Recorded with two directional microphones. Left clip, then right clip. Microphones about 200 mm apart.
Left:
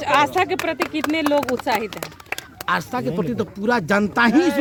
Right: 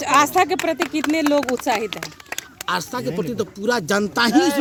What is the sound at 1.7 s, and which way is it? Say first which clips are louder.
Speech: even; 50° right (ahead or behind).